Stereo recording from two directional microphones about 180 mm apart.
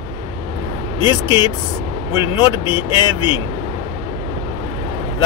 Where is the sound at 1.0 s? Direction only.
25° left (ahead or behind).